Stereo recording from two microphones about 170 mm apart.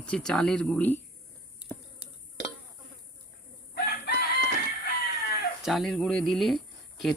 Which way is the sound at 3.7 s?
75° left (ahead or behind).